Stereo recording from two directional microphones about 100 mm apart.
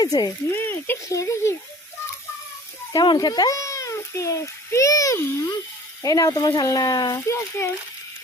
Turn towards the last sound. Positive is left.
turn(degrees=30)  # may be behind; listen again after turning